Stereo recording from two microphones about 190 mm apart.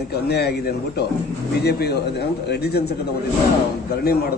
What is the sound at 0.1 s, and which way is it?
Speech, 60° left (ahead or behind).